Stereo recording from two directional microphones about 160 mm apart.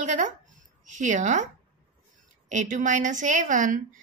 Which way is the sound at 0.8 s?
50° right (ahead or behind).